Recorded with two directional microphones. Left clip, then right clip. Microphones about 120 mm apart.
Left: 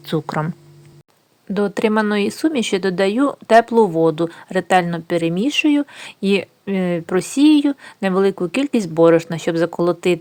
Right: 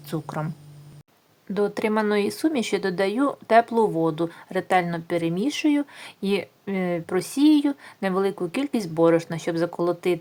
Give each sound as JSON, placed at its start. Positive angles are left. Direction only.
{"t": 0.0, "sound": "speech", "side_deg": 30}
{"t": 1.5, "sound": "speech", "side_deg": 30}